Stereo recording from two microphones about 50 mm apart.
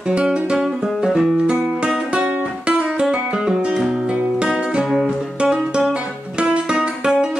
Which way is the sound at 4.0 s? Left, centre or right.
Right.